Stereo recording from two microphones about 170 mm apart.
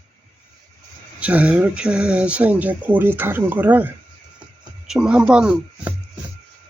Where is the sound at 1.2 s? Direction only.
10° right (ahead or behind).